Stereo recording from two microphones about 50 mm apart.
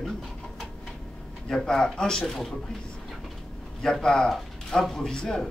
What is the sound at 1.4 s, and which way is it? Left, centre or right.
A man's voice, centre.